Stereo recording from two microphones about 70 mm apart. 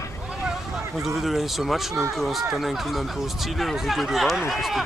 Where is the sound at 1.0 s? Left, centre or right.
Centre.